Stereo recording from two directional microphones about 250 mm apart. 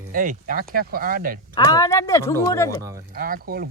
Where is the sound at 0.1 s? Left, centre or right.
Right.